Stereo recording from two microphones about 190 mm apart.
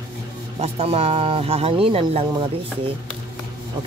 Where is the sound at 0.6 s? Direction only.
30° right (ahead or behind).